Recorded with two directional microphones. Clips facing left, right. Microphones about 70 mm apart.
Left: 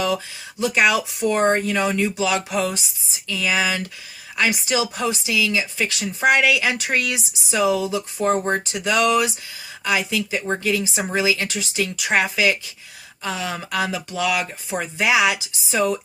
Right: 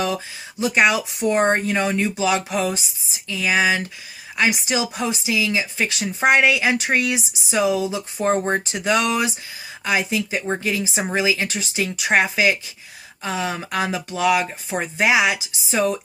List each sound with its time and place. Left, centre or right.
0.6 s a woman's voice: right